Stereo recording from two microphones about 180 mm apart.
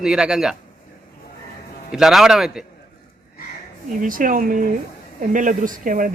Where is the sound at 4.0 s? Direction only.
50° right (ahead or behind).